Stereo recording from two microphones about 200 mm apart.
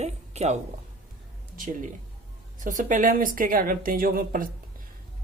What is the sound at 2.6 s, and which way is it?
A woman's voice, 40° right (ahead or behind).